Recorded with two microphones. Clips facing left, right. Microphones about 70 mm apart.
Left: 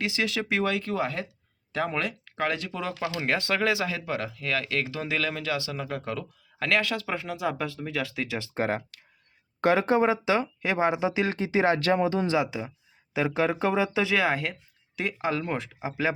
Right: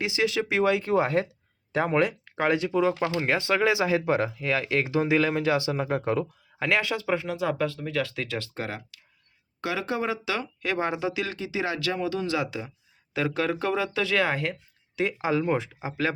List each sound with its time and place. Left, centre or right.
0.0 s speech: centre
0.9 s speech: right; by 3.8 s centre
3.8 s speech: right
6.6 s speech: centre
8.4 s speech: left
9.6 s speech: left; by 14.2 s centre
14.2 s speech: centre